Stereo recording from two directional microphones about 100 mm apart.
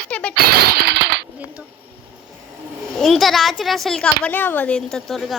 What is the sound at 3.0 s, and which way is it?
Speech, centre (ahead or behind).